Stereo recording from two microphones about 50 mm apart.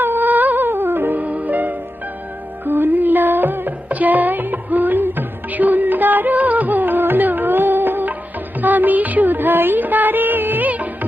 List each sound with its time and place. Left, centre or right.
0.0 s music: right